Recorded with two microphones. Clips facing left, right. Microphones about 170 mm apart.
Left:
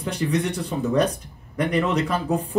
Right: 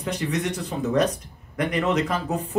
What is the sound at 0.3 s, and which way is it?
A man's voice, 30° left (ahead or behind).